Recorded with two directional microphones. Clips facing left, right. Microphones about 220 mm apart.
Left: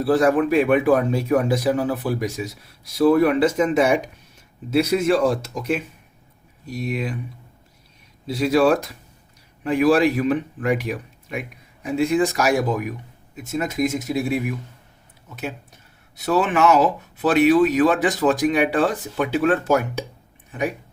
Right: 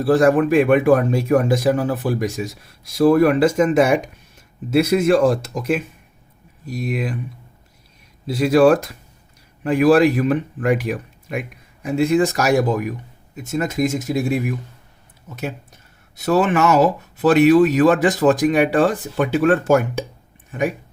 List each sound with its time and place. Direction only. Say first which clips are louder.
0.0 s speech: right 3 dB; 50° right (ahead or behind)
8.3 s speech: right 4 dB; 50° right (ahead or behind)
16.1 s speech: right 3 dB; 45° right (ahead or behind)